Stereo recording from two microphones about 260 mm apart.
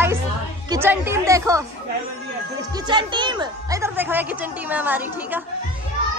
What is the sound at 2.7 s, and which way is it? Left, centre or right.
Speech, centre.